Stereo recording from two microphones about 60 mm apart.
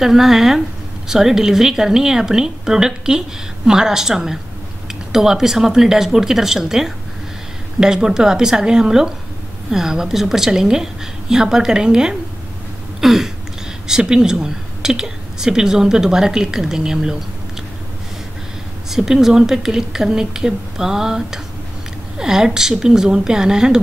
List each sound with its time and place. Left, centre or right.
0.0 s speech: centre
13.0 s a sound: centre
13.8 s speech: centre
18.9 s speech: centre